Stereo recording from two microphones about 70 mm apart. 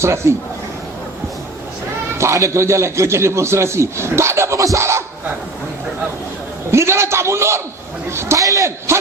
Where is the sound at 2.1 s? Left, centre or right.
Right.